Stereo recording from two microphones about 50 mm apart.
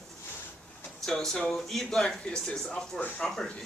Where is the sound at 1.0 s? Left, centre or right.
Centre.